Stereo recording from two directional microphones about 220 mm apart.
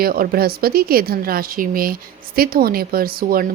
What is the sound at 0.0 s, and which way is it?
A woman's voice, 40° right (ahead or behind).